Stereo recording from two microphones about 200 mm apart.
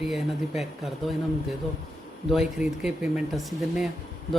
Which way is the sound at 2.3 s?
Centre (ahead or behind).